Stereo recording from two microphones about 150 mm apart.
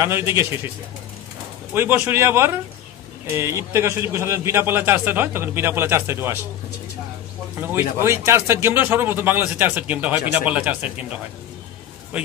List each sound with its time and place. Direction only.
0.0 s a man's voice: 15° right (ahead or behind)
1.7 s a man's voice: 15° right (ahead or behind)
7.6 s a man's voice: 10° right (ahead or behind)